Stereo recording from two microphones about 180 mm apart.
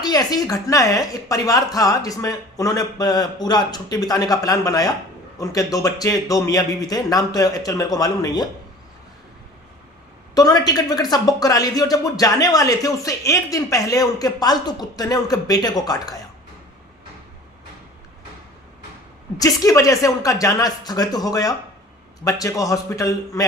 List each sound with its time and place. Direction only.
0.0 s speech: 20° left (ahead or behind)
10.3 s speech: 20° left (ahead or behind)
19.4 s a man's voice: 15° left (ahead or behind)